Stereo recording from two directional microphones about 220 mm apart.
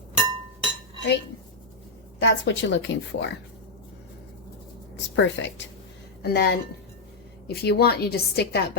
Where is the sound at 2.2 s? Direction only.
55° left (ahead or behind).